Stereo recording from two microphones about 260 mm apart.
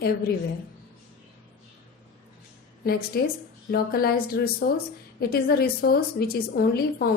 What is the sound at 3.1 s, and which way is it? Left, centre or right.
A woman's voice, left.